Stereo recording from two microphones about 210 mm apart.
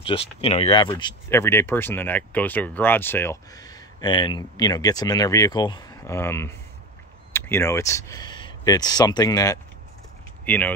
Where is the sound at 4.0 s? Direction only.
20° left (ahead or behind).